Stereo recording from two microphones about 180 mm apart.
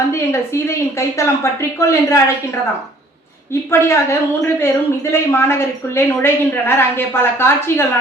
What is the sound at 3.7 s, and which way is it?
A woman's voice, 15° left (ahead or behind).